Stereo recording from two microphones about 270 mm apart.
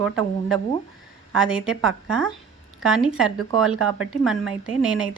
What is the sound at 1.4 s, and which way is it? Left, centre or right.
A woman's voice, centre.